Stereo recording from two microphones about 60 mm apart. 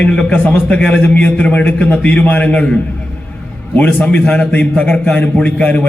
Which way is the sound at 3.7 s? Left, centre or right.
Left.